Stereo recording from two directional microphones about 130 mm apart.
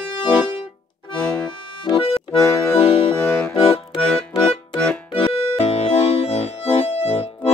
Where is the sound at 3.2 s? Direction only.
15° left (ahead or behind).